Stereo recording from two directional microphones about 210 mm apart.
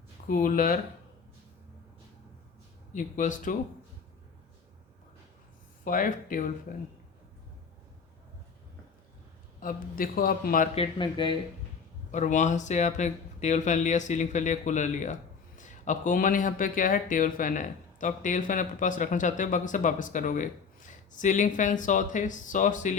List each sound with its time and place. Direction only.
0.3 s speech: 40° left (ahead or behind)
2.9 s speech: 35° left (ahead or behind)
5.8 s speech: 40° left (ahead or behind)
9.6 s a man's voice: 40° left (ahead or behind)
10.8 s speech: 20° left (ahead or behind)
12.1 s speech: 35° left (ahead or behind)